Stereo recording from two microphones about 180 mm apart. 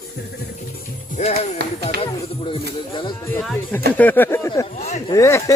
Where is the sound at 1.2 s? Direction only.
40° left (ahead or behind).